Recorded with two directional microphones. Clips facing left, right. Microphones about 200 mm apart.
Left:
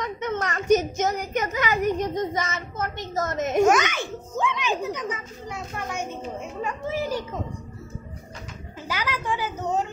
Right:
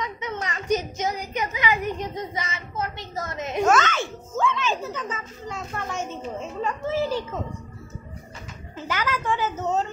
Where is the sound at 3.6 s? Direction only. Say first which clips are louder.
Left 1 dB; 15° left (ahead or behind).